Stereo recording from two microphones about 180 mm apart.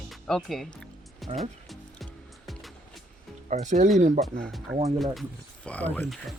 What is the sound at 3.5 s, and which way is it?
Speech, 40° right (ahead or behind).